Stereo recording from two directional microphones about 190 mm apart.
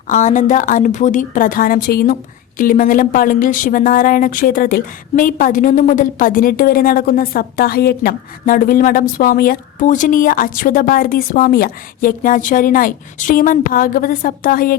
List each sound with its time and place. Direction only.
0.1 s a woman's voice: 40° left (ahead or behind)